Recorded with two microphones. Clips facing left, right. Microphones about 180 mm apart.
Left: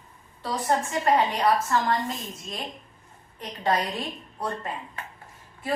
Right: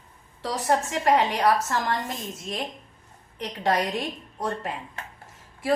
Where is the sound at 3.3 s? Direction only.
80° right.